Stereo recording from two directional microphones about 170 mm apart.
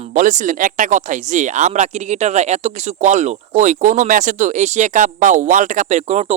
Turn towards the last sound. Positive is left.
turn(degrees=-40)  # may be behind; listen again after turning